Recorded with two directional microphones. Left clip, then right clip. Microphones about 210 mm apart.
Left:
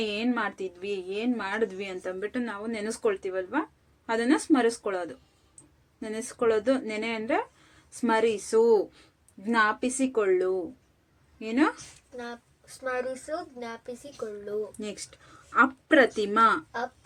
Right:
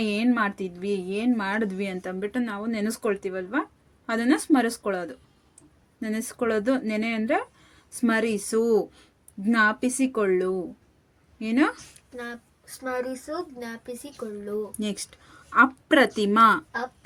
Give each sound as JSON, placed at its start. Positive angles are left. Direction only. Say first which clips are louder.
{"t": 0.0, "sound": "a woman's voice", "louder": "right 4 dB", "side_deg": -30}
{"t": 12.1, "sound": "speech", "louder": "right 3 dB", "side_deg": -55}
{"t": 14.8, "sound": "speech", "louder": "right 5 dB", "side_deg": -25}